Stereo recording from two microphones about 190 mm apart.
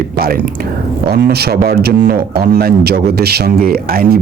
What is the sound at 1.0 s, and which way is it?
A man's voice, 55° right (ahead or behind).